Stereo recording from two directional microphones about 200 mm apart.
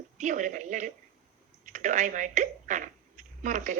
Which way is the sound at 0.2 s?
40° right (ahead or behind).